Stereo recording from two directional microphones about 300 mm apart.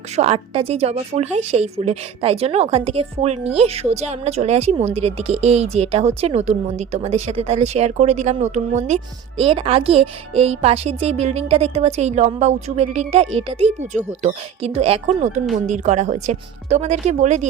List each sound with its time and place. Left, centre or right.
0.2 s speech: centre